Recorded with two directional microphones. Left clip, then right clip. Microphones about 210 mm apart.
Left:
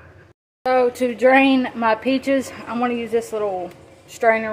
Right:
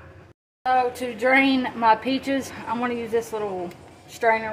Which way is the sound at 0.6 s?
30° left (ahead or behind).